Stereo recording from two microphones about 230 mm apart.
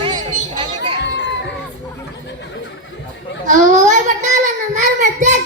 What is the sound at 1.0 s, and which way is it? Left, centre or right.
Crowd, left.